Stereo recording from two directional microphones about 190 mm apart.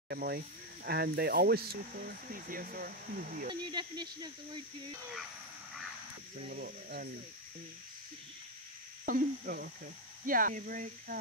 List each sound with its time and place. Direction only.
0.1 s speech: 55° right (ahead or behind)
3.4 s speech: 20° right (ahead or behind)
6.3 s speech: 40° right (ahead or behind)
9.0 s speech: 50° right (ahead or behind)